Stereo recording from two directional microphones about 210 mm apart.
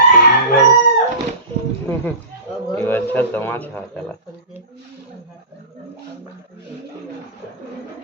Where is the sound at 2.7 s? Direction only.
10° left (ahead or behind).